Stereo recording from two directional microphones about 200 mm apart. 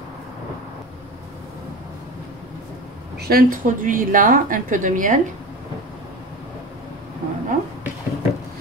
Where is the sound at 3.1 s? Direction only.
50° right (ahead or behind).